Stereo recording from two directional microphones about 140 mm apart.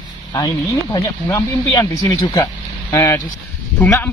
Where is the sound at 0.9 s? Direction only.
30° left (ahead or behind).